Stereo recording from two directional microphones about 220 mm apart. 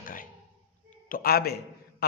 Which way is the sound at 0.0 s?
40° left (ahead or behind).